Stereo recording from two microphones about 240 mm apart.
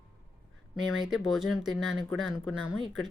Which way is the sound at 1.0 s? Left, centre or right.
Centre.